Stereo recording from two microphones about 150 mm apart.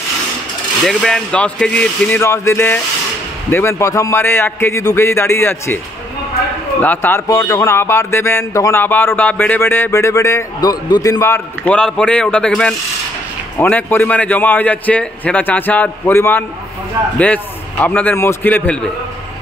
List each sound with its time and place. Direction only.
0.8 s a man's voice: 5° left (ahead or behind)
6.8 s a man's voice: 10° left (ahead or behind)